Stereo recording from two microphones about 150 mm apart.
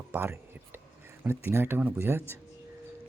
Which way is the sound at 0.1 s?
15° right (ahead or behind).